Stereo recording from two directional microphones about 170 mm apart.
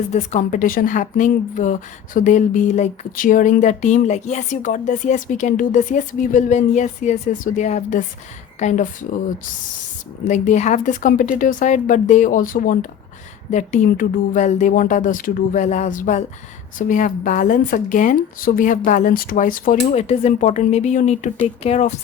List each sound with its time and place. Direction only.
0.1 s speech: 45° left (ahead or behind)
10.2 s speech: 45° left (ahead or behind)
20.0 s speech: 40° left (ahead or behind)